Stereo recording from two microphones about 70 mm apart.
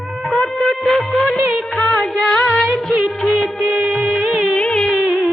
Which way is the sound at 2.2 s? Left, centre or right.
Centre.